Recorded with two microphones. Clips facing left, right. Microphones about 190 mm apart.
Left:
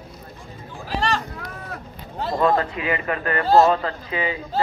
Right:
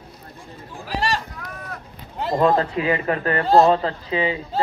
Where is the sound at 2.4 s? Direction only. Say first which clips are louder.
Right 2 dB; 30° right (ahead or behind).